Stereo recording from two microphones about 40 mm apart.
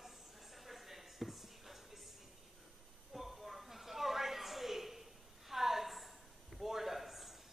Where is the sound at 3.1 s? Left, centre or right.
Centre.